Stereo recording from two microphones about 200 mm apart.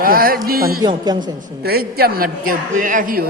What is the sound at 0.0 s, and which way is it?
Speech, 45° right (ahead or behind).